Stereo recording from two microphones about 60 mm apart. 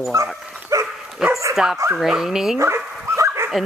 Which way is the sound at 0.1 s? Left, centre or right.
Right.